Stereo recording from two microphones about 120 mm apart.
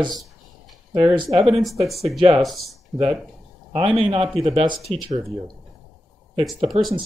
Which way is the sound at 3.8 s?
45° right (ahead or behind).